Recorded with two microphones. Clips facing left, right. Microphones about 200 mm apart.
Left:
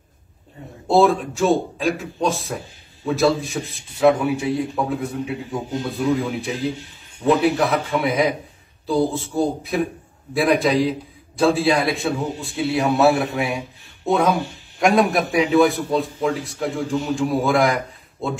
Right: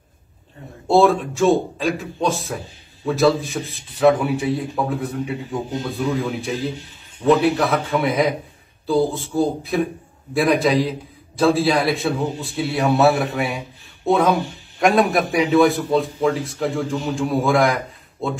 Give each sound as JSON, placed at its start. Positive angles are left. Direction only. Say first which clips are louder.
{"t": 0.8, "sound": "a man's voice", "louder": "right 1 dB", "side_deg": 0}